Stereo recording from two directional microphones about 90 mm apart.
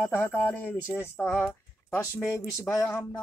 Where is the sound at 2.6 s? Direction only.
30° left (ahead or behind).